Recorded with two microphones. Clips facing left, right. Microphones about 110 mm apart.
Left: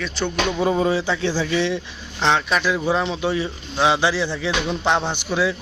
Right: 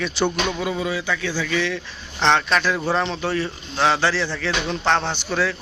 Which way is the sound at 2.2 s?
5° left (ahead or behind).